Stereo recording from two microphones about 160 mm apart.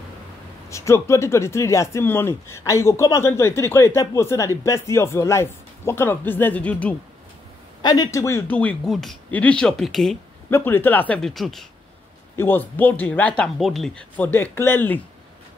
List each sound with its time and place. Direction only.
0.7 s speech: 20° left (ahead or behind)
7.8 s speech: 25° left (ahead or behind); by 10.1 s centre (ahead or behind)
10.5 s speech: 15° left (ahead or behind)
12.4 s speech: 10° left (ahead or behind)